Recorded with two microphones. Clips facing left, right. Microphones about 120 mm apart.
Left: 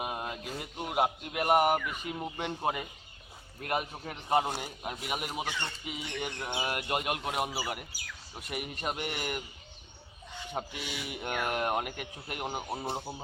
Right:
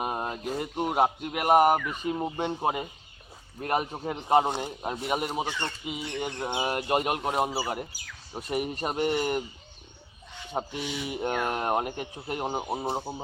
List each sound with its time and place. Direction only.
0.0 s speech: 40° right (ahead or behind)
3.6 s speech: 40° right (ahead or behind)
4.3 s speech: 25° right (ahead or behind)
6.1 s speech: 25° right (ahead or behind)
10.7 s speech: 30° right (ahead or behind)